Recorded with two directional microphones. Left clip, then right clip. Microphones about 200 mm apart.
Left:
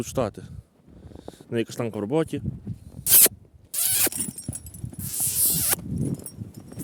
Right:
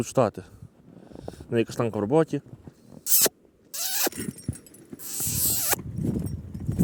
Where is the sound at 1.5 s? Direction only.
10° left (ahead or behind).